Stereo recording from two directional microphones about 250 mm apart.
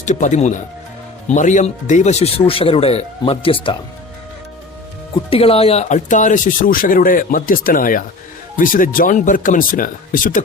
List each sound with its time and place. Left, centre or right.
0.0 s speech: left
5.1 s speech: left